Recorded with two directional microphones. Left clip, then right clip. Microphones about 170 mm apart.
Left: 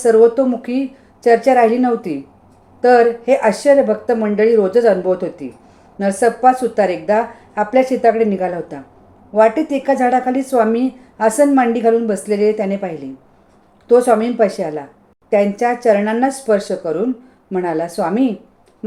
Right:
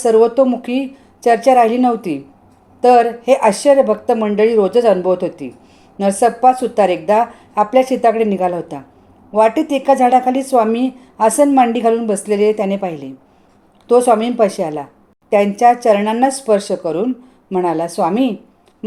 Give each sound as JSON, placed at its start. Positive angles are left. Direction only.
{"t": 0.0, "sound": "a woman's voice", "side_deg": -20}